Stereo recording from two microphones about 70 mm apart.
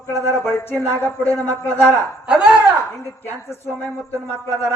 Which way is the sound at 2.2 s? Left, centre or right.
Centre.